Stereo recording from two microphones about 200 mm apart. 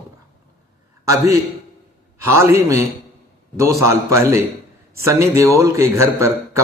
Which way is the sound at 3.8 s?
15° right (ahead or behind).